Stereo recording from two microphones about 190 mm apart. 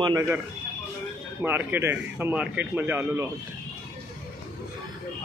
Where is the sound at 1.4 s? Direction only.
10° right (ahead or behind).